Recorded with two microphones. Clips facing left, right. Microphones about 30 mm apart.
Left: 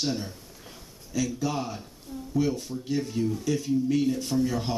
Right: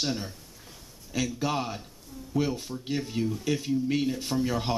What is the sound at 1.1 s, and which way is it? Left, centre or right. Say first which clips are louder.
A man's voice: even; right.